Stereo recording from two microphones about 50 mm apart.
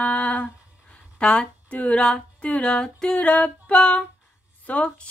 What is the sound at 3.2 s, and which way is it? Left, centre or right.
Female singing, left.